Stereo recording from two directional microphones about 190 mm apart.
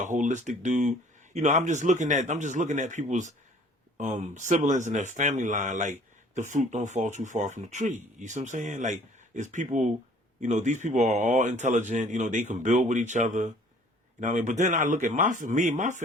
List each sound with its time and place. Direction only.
0.0 s speech: 40° right (ahead or behind)